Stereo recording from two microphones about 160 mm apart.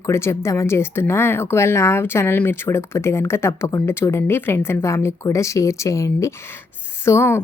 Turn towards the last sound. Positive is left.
turn(degrees=15)  # may be behind; listen again after turning